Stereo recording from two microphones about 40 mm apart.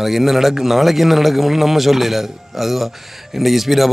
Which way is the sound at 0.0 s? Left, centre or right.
Centre.